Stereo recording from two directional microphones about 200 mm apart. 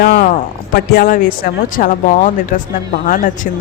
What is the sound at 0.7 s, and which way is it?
Speech, 45° left (ahead or behind).